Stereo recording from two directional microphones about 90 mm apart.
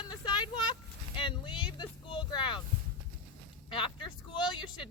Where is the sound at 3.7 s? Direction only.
65° left (ahead or behind).